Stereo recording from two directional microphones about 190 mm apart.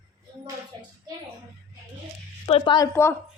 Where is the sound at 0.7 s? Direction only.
20° right (ahead or behind).